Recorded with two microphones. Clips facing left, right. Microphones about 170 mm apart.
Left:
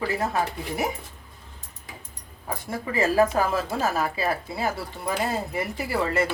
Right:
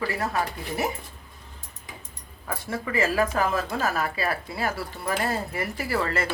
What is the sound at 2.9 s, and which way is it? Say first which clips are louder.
Speech: left 3 dB; 30° left (ahead or behind).